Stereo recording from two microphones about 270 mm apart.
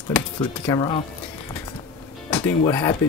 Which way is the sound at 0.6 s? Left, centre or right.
Centre.